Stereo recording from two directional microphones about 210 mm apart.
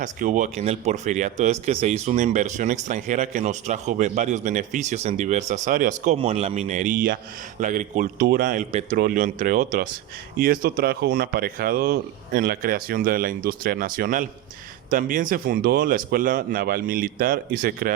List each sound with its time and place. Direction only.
0.0 s speech: 35° right (ahead or behind)